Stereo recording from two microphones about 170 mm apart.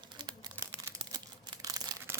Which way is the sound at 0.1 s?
25° right (ahead or behind).